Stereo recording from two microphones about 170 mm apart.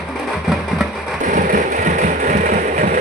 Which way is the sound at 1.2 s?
50° right (ahead or behind).